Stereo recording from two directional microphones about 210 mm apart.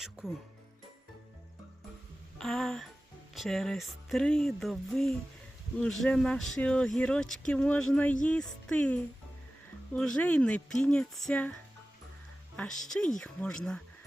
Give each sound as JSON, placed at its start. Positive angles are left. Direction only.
{"t": 0.0, "sound": "speech", "side_deg": 0}
{"t": 2.4, "sound": "speech", "side_deg": 0}
{"t": 12.5, "sound": "speech", "side_deg": 5}